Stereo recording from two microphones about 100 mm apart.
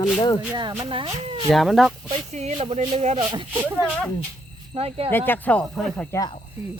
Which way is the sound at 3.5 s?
20° right (ahead or behind).